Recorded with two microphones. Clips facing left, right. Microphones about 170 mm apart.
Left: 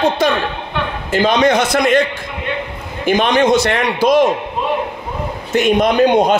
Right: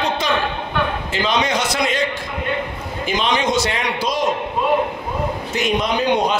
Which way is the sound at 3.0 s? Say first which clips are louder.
Left 7 dB; 55° left (ahead or behind).